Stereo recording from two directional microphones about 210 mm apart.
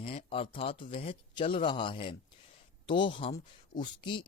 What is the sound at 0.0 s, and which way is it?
Speech, 25° left (ahead or behind).